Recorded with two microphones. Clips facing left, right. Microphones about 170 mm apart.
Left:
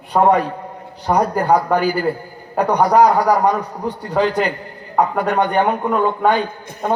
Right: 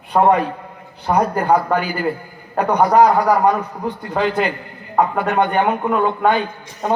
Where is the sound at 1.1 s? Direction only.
40° left (ahead or behind).